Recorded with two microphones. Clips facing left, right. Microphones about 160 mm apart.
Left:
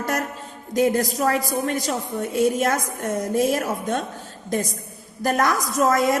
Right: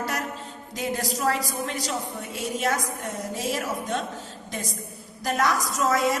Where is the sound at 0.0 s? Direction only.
50° left (ahead or behind).